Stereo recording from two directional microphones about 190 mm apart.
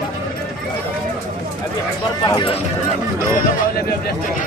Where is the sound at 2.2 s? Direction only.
25° left (ahead or behind).